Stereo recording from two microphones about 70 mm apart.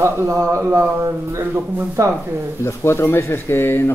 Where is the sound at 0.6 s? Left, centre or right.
Right.